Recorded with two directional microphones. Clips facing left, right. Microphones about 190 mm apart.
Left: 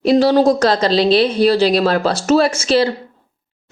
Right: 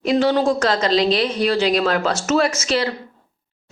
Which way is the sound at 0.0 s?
35° left (ahead or behind).